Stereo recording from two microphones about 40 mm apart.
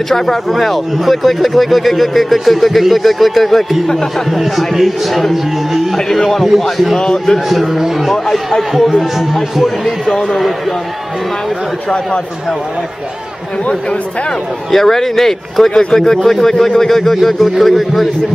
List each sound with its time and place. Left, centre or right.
0.1 s speech: centre
4.3 s speech: centre
5.9 s speech: centre
7.0 s a man's voice: centre
7.4 s speech: centre
10.0 s speech: centre
14.7 s speech: centre